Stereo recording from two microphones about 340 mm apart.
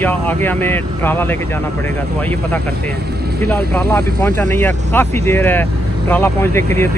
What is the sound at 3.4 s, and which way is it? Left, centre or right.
Speech, centre.